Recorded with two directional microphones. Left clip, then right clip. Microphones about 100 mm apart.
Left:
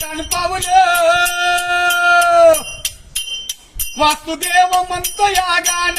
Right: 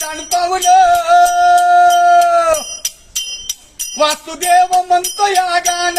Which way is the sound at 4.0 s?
45° right (ahead or behind).